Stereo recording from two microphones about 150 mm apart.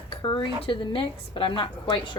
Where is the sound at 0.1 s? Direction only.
35° left (ahead or behind).